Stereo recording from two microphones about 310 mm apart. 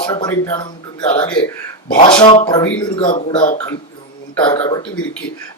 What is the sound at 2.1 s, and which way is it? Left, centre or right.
A man's voice, centre.